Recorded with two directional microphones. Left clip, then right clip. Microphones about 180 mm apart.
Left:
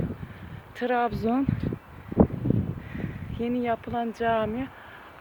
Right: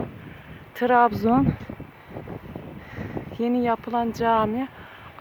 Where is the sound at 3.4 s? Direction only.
35° right (ahead or behind).